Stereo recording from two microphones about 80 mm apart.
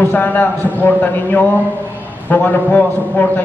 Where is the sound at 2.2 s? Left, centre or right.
Left.